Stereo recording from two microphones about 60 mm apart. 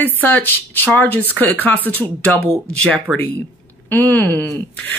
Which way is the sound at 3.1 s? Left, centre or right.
Centre.